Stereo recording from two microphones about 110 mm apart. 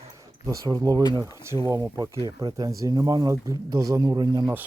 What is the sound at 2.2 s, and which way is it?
Speech, 40° right (ahead or behind).